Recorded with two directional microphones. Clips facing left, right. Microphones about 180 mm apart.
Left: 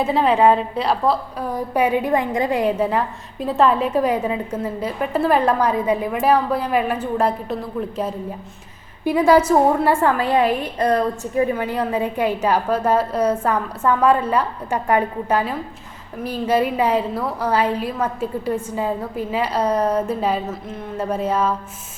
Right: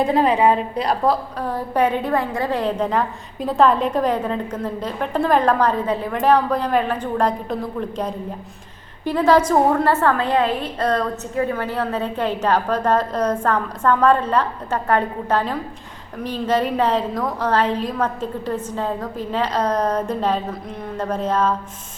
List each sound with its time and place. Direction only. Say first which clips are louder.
0.0 s a woman's voice: even; centre (ahead or behind)